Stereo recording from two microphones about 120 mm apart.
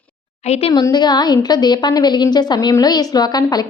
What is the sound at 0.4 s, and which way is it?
Speech, 65° left (ahead or behind).